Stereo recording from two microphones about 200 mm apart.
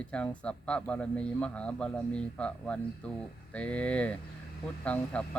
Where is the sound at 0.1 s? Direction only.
5° left (ahead or behind).